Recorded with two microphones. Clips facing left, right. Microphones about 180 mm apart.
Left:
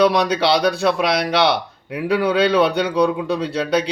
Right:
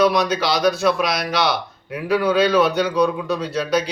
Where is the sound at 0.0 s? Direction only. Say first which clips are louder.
Left 2 dB; 30° left (ahead or behind).